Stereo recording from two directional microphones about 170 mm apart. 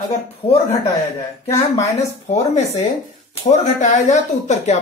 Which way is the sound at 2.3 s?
40° left (ahead or behind).